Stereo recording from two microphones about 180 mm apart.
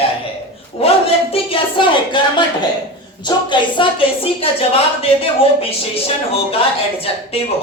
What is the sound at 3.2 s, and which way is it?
A woman's voice, 25° left (ahead or behind).